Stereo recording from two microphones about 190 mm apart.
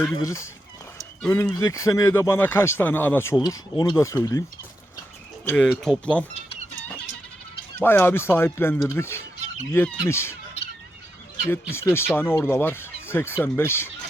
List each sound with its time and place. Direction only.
0.2 s speech: 15° left (ahead or behind)
5.5 s speech: 5° left (ahead or behind)
7.8 s speech: 10° left (ahead or behind)
11.4 s speech: 15° left (ahead or behind)